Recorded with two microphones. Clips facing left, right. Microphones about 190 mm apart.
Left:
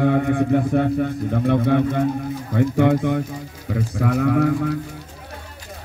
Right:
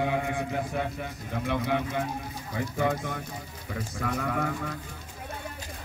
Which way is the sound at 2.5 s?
65° left (ahead or behind).